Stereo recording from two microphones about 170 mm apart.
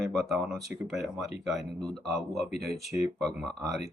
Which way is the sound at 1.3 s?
Centre (ahead or behind).